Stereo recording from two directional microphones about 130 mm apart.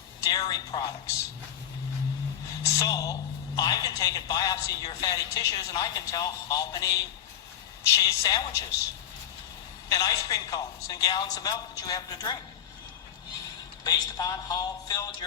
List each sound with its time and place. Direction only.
0.2 s music: 30° left (ahead or behind)
2.6 s a woman's voice: 25° left (ahead or behind)
9.9 s a woman's voice: 25° left (ahead or behind)
13.8 s speech: 30° left (ahead or behind)